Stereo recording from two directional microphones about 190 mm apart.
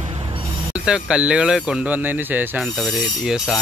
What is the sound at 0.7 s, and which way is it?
Speech, 5° right (ahead or behind).